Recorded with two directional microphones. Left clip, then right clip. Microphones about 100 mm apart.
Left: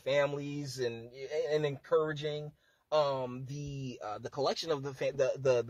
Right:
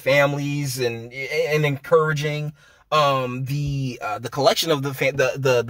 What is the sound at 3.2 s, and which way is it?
Speech, 35° left (ahead or behind).